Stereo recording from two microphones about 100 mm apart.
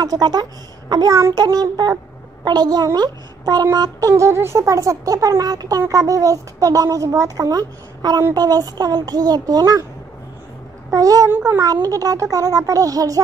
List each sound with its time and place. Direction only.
0.0 s speech: 40° right (ahead or behind)
1.1 s a child's voice: 30° right (ahead or behind)
1.4 s a child's voice: 40° right (ahead or behind)
10.9 s speech: 35° right (ahead or behind)
11.2 s a child's voice: 25° right (ahead or behind)
11.6 s speech: 40° right (ahead or behind)